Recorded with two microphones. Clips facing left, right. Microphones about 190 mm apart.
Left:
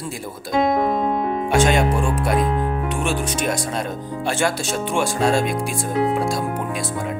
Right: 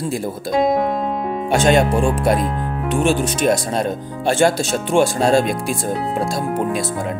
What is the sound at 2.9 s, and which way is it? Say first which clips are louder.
Speech: right 5 dB; 25° right (ahead or behind).